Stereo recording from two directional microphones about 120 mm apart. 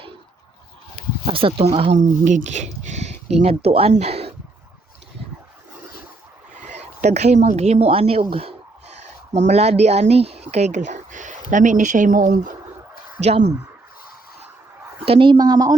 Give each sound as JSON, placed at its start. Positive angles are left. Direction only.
{"t": 1.2, "sound": "speech", "side_deg": -50}
{"t": 1.9, "sound": "speech", "side_deg": -90}
{"t": 6.7, "sound": "a woman's voice", "side_deg": -70}
{"t": 9.5, "sound": "speech", "side_deg": -65}
{"t": 13.1, "sound": "speech", "side_deg": -65}
{"t": 15.0, "sound": "speech", "side_deg": -50}